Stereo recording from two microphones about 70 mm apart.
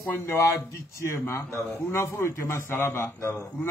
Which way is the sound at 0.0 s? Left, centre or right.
Left.